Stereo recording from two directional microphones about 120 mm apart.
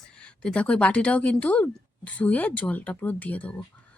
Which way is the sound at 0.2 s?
10° left (ahead or behind).